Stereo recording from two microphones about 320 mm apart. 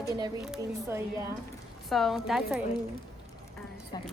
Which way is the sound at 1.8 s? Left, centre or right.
Centre.